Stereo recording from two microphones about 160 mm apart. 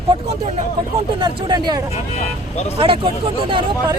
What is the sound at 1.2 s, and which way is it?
Speech, 25° right (ahead or behind).